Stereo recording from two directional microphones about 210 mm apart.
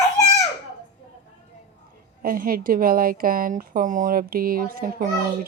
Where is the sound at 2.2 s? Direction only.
45° right (ahead or behind).